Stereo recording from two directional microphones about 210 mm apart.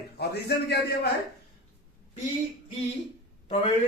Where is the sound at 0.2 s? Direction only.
50° left (ahead or behind).